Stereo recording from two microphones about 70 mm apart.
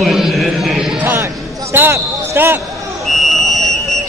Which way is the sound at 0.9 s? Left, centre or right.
Right.